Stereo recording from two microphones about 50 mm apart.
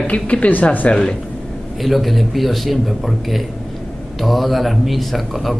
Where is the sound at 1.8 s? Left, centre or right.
Centre.